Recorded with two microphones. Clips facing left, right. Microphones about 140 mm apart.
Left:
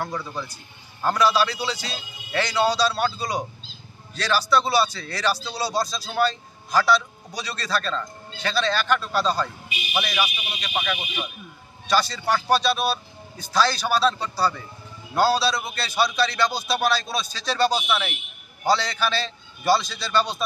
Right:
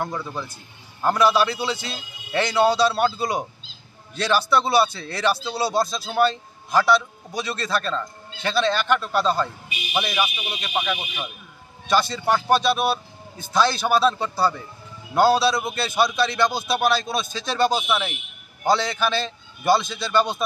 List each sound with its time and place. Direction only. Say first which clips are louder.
0.1 s speech: right 1 dB; centre (ahead or behind)
1.0 s a man's voice: right 2 dB; 20° right (ahead or behind)